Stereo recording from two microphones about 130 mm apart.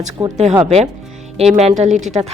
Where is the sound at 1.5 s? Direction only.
60° right (ahead or behind).